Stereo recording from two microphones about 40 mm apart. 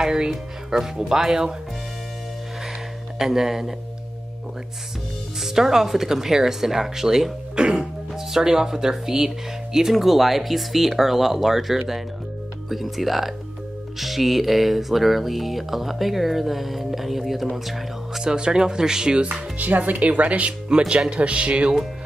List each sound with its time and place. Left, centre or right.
0.0 s speech: centre
3.2 s speech: centre
5.4 s speech: centre
8.1 s music: centre
18.2 s speech: right
19.3 s speech: right